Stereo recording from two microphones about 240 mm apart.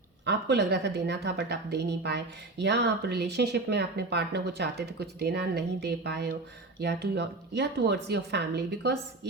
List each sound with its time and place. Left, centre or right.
0.3 s a woman's voice: right